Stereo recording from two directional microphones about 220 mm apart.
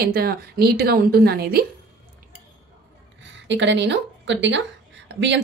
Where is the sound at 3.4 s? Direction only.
55° right (ahead or behind).